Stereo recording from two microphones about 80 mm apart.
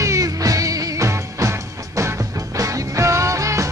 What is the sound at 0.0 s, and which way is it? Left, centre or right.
Music, right.